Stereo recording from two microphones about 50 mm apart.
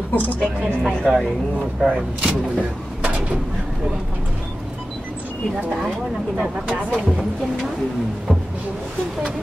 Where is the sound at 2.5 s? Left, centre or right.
Right.